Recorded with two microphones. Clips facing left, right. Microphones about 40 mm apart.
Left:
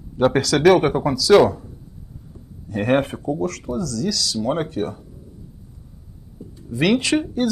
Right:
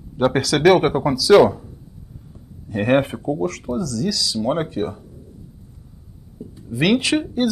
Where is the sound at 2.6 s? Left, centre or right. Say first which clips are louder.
Right 1 dB; right.